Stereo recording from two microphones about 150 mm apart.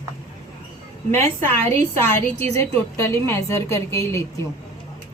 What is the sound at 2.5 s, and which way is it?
A woman's voice, 20° left (ahead or behind).